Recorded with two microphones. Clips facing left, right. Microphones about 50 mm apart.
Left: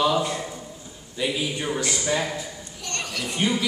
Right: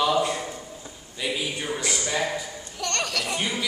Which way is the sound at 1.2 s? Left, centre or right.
Centre.